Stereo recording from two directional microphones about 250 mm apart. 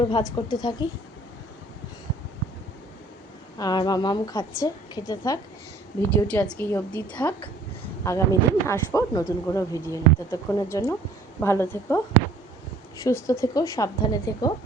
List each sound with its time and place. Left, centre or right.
0.1 s speech: centre
3.6 s a woman's voice: centre